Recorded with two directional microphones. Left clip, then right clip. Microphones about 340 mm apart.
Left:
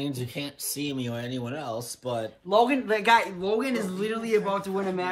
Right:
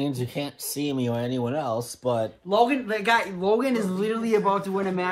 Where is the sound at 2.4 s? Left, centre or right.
Left.